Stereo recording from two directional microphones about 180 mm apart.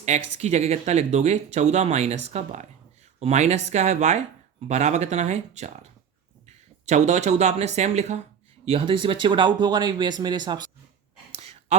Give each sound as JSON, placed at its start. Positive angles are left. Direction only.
{"t": 0.0, "sound": "speech", "side_deg": -40}
{"t": 6.8, "sound": "speech", "side_deg": -40}
{"t": 11.3, "sound": "a sound", "side_deg": -40}